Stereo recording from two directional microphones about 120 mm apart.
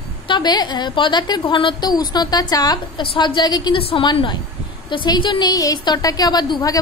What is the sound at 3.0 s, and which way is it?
A woman's voice, 45° left (ahead or behind).